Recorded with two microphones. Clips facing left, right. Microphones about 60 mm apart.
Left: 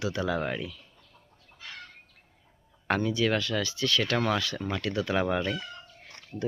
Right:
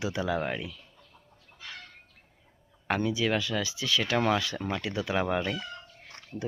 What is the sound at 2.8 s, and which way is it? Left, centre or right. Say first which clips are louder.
Speech: left 1 dB; centre.